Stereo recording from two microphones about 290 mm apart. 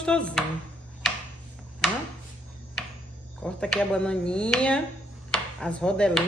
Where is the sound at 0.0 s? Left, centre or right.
Centre.